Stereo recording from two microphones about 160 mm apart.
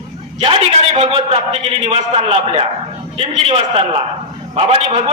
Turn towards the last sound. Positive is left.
turn(degrees=-40)  # may be behind; listen again after turning